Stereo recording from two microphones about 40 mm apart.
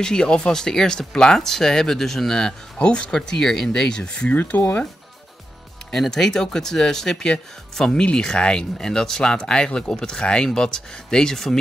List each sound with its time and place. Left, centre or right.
0.0 s speech: centre
2.8 s speech: left
3.2 s speech: centre
4.1 s speech: left
4.5 s speech: left
5.9 s speech: centre